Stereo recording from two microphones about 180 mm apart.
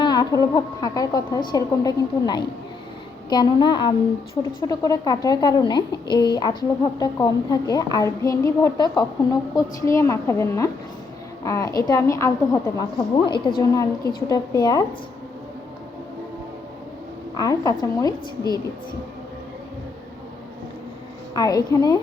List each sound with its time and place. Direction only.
0.0 s a woman's voice: 25° left (ahead or behind)
17.3 s speech: 20° left (ahead or behind)
21.3 s speech: 20° left (ahead or behind)